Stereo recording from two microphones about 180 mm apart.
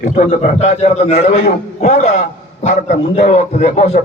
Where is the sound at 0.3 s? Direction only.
45° left (ahead or behind).